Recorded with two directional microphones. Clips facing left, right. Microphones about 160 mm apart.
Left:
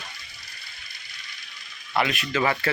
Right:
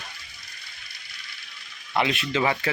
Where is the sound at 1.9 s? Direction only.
25° right (ahead or behind).